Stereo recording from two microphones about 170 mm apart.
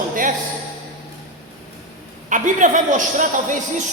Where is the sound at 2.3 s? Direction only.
50° right (ahead or behind).